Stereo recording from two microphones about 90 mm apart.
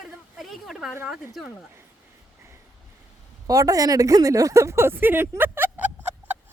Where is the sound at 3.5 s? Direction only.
40° right (ahead or behind); by 6.4 s 20° right (ahead or behind).